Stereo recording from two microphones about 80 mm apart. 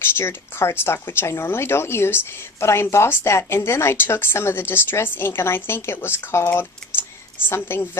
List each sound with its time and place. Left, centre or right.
0.0 s a woman's voice: left